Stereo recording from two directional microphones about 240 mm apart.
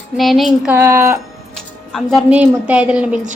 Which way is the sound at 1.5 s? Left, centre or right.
Centre.